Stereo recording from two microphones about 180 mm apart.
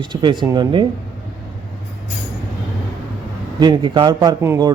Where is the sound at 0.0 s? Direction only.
25° right (ahead or behind).